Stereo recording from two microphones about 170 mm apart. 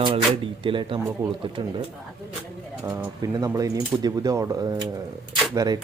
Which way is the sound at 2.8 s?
20° right (ahead or behind).